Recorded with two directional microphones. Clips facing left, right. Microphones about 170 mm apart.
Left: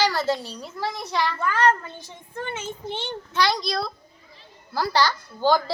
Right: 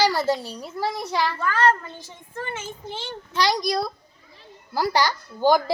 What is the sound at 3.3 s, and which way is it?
A child's voice, 15° right (ahead or behind).